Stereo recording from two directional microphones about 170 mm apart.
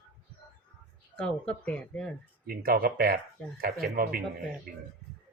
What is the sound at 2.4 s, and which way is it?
Speech, 60° right (ahead or behind).